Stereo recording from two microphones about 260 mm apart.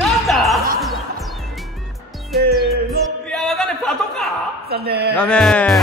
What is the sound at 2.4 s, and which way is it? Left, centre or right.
Music, right.